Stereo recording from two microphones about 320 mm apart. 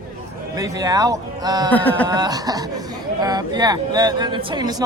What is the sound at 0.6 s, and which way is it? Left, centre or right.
Speech, centre.